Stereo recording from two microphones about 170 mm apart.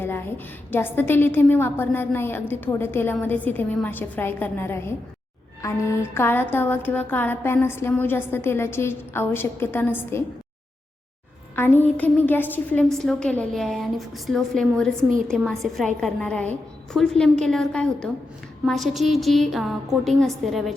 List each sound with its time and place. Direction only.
0.0 s a woman's voice: 15° left (ahead or behind)
11.5 s a woman's voice: 10° left (ahead or behind)